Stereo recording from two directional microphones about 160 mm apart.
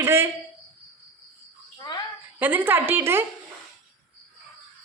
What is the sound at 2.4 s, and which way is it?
Speech, 10° right (ahead or behind).